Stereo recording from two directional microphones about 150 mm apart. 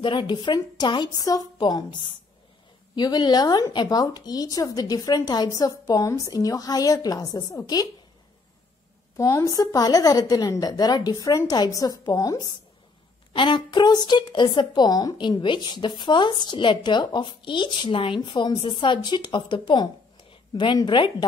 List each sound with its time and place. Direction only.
0.0 s speech: 35° left (ahead or behind)
9.1 s speech: 20° left (ahead or behind)